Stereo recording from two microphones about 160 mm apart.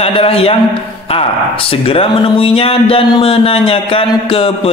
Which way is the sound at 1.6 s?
35° left (ahead or behind).